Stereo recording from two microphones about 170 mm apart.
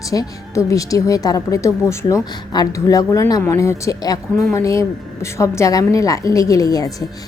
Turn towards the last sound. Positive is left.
turn(degrees=20)  # may be behind; listen again after turning